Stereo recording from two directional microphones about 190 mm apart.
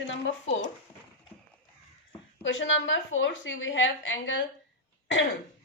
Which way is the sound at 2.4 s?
75° left (ahead or behind).